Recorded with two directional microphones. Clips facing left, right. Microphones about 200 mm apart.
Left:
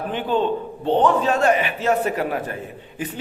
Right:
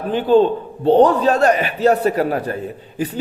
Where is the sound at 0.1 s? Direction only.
35° right (ahead or behind).